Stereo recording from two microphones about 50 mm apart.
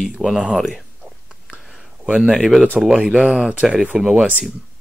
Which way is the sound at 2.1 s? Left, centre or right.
Centre.